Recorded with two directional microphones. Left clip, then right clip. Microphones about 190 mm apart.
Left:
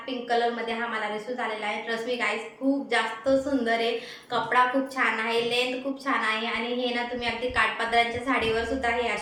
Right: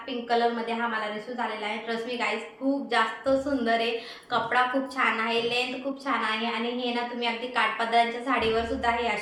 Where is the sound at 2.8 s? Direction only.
10° right (ahead or behind).